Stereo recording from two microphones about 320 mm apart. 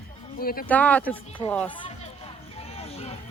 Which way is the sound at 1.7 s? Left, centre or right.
Centre.